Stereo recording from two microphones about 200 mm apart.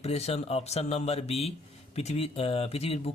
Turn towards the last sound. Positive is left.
turn(degrees=30)  # may be behind; listen again after turning